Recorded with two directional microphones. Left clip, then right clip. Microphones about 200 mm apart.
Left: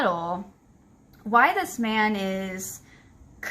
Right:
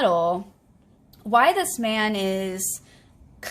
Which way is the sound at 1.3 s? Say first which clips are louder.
Right 2 dB; 50° right (ahead or behind).